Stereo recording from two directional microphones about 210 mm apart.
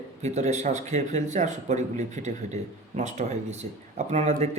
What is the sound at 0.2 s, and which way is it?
A man's voice, 35° right (ahead or behind).